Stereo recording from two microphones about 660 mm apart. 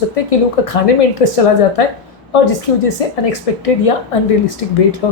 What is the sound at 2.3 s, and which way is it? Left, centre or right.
Speech, left.